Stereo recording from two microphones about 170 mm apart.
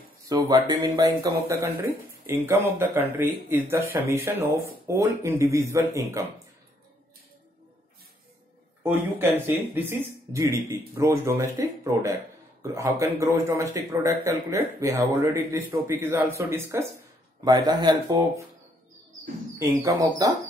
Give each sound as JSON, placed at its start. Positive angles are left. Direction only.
{"t": 0.3, "sound": "a man's voice", "side_deg": -20}
{"t": 8.8, "sound": "a man's voice", "side_deg": -10}
{"t": 19.6, "sound": "speech", "side_deg": -20}